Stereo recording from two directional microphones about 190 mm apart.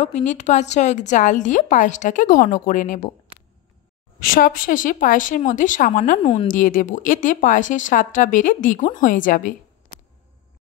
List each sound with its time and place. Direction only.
0.0 s a woman's voice: 40° left (ahead or behind)
4.2 s a woman's voice: 50° left (ahead or behind)